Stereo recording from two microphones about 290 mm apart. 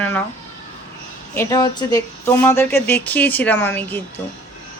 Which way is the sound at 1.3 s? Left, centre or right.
Centre.